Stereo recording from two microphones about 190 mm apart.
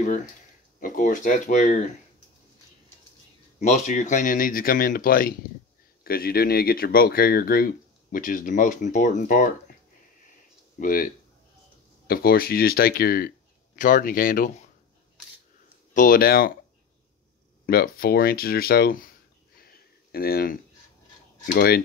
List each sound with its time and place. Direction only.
0.7 s speech: 45° left (ahead or behind)
3.5 s speech: 40° left (ahead or behind)
10.8 s speech: 45° left (ahead or behind)
12.1 s speech: 50° left (ahead or behind)
15.9 s speech: 45° left (ahead or behind)
17.6 s speech: 50° left (ahead or behind)
19.5 s a sound: 55° left (ahead or behind)
21.5 s speech: 55° left (ahead or behind)